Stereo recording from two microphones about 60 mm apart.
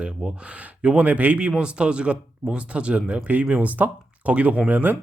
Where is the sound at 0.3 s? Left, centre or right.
Right.